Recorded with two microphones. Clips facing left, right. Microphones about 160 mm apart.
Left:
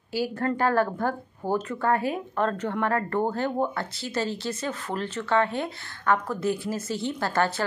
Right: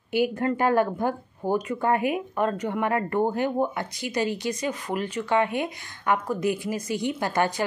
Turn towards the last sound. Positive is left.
turn(degrees=-15)  # may be behind; listen again after turning